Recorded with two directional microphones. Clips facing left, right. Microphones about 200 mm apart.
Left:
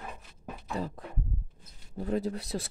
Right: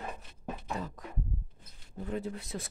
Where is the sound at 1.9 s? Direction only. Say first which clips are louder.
Left 5 dB; 35° left (ahead or behind).